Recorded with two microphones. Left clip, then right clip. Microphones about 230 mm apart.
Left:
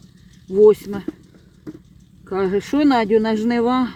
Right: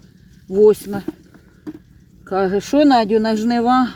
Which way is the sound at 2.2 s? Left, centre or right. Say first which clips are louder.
Right 2 dB; centre.